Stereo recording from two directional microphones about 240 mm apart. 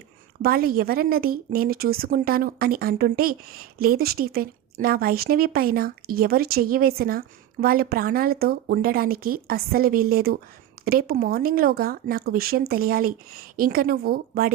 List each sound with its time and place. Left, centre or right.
0.4 s speech: right